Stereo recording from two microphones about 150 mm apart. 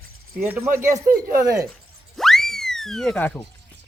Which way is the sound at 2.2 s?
Centre (ahead or behind).